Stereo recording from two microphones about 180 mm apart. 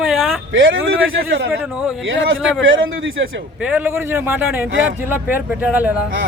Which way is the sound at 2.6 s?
90° right.